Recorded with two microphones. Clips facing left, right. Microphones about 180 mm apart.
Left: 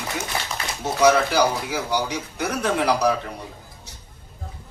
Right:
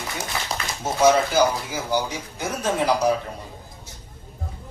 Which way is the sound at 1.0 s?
70° left (ahead or behind).